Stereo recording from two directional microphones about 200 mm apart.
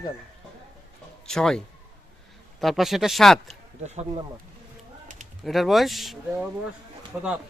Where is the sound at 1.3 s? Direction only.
Centre (ahead or behind).